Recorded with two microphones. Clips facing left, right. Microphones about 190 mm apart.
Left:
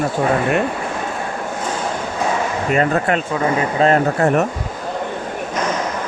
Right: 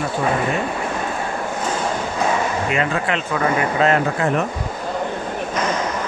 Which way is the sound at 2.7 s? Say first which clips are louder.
Left 8 dB; 40° left (ahead or behind).